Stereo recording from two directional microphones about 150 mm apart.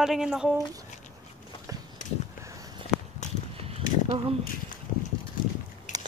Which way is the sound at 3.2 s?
50° left (ahead or behind).